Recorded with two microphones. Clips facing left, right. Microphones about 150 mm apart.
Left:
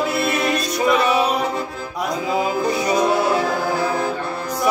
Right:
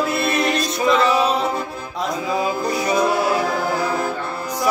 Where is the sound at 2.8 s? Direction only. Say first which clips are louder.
Even; 20° left (ahead or behind).